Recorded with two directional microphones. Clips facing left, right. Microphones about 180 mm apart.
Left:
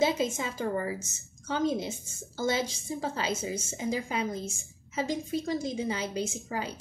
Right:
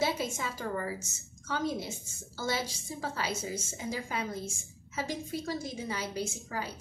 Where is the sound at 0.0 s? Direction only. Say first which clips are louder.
Left 5 dB; 20° left (ahead or behind).